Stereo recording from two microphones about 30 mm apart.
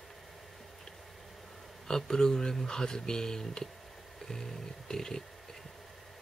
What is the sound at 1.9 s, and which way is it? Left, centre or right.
Speech, left.